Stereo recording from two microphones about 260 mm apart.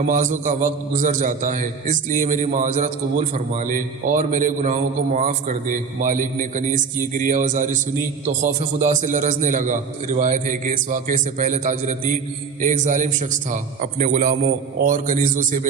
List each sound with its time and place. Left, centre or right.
0.1 s a man's voice: right